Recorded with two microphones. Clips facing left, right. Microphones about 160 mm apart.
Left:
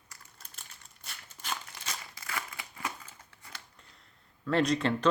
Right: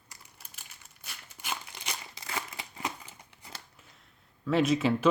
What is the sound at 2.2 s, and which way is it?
Crumpling, 25° right (ahead or behind).